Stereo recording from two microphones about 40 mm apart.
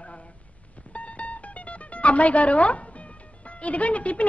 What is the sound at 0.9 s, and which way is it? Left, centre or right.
Mandolin, left.